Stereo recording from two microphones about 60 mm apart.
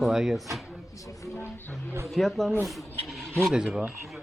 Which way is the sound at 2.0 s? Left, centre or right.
Centre.